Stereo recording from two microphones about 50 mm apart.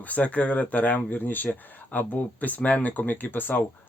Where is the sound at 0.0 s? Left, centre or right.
Left.